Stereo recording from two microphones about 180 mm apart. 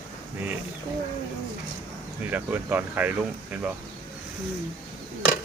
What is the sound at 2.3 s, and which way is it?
Speech, 10° right (ahead or behind).